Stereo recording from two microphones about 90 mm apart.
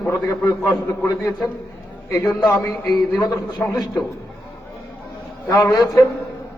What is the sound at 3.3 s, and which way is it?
Speech, 35° left (ahead or behind).